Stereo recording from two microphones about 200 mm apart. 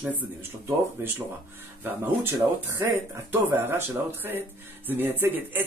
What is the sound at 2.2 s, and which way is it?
Speech, 15° right (ahead or behind).